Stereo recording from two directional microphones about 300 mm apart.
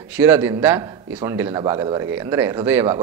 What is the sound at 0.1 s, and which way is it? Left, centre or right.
A man's voice, centre.